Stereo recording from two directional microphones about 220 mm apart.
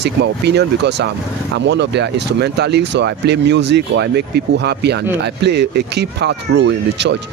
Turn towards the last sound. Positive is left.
turn(degrees=-50)  # may be behind; listen again after turning